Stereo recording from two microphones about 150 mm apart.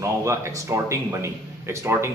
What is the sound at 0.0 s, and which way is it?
A man's voice, 20° right (ahead or behind).